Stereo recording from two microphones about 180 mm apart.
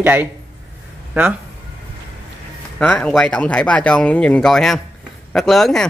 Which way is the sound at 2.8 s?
5° left (ahead or behind).